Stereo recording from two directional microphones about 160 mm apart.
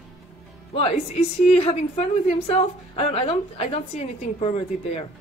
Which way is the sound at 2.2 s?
40° left (ahead or behind).